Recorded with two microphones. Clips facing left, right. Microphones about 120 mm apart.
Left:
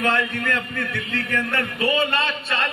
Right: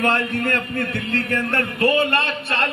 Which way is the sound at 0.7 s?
50° right (ahead or behind).